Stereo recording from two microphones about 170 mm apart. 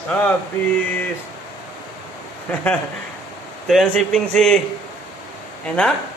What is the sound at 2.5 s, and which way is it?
A man's voice, 10° left (ahead or behind).